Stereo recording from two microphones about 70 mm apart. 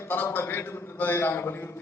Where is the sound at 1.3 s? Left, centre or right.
Left.